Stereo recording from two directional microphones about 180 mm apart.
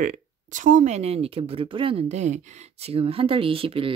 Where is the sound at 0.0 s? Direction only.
45° right (ahead or behind).